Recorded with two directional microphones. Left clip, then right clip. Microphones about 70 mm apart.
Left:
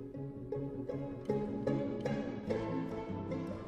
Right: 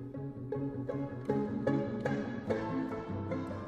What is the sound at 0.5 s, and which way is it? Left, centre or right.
Music, centre.